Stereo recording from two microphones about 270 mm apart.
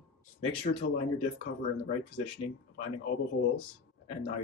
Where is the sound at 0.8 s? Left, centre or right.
Left.